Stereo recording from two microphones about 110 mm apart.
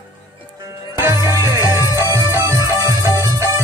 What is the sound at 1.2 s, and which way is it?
Music, 30° right (ahead or behind).